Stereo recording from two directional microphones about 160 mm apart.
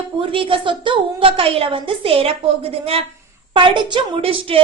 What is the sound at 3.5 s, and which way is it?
A woman's voice, 30° right (ahead or behind).